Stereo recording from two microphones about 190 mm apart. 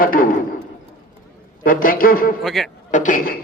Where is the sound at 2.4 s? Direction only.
Centre (ahead or behind).